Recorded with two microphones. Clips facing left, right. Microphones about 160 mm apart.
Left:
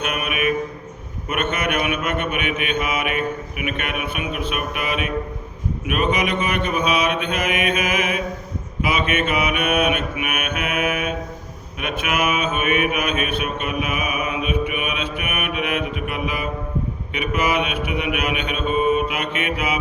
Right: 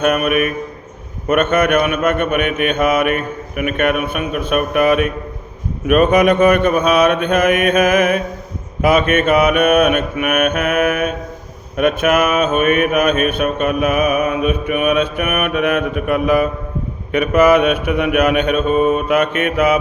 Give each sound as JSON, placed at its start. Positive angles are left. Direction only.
{"t": 0.0, "sound": "mantra", "side_deg": -45}